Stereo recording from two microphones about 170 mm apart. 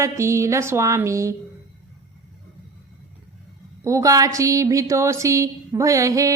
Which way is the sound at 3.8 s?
20° right (ahead or behind).